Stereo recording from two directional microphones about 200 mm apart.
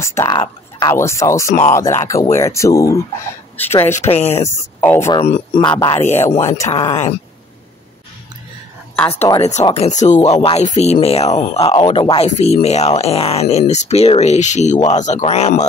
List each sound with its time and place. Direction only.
0.0 s speech: 15° left (ahead or behind)
4.0 s speech: 35° left (ahead or behind)
4.4 s speech: 15° left (ahead or behind)
5.2 s speech: 25° left (ahead or behind)
6.0 s speech: 35° left (ahead or behind)
6.4 s speech: 15° left (ahead or behind)
6.7 s speech: 30° left (ahead or behind)
8.9 s speech: 5° left (ahead or behind)
9.3 s speech: 35° left (ahead or behind)